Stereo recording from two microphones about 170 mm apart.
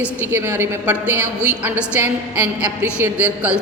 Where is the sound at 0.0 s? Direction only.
10° right (ahead or behind).